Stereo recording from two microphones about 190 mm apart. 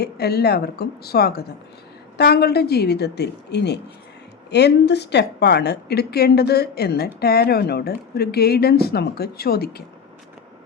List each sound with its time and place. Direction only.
0.0 s a woman's voice: 55° left (ahead or behind)